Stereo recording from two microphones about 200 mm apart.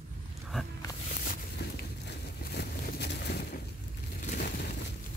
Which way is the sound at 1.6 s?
55° left (ahead or behind).